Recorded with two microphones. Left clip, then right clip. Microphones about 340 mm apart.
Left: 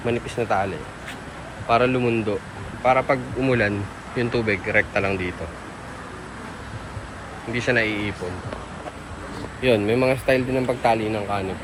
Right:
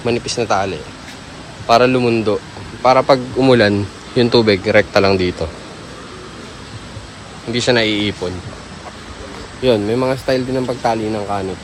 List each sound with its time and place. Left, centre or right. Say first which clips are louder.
0.0 s a man's voice: right 6 dB; centre
7.5 s a man's voice: right 7 dB; centre
9.6 s a man's voice: right 4 dB; centre